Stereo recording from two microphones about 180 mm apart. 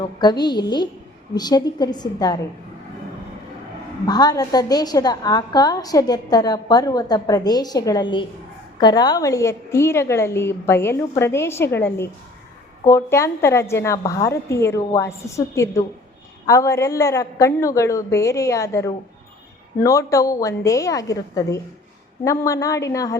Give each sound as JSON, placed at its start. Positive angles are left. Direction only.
{"t": 0.0, "sound": "a woman's voice", "side_deg": 25}
{"t": 4.0, "sound": "a woman's voice", "side_deg": 20}